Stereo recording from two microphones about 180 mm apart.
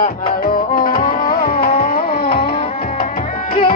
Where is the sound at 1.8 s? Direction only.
55° left (ahead or behind).